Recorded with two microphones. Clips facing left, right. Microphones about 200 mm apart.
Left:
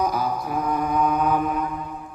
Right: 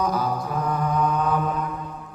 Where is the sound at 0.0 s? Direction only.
10° left (ahead or behind).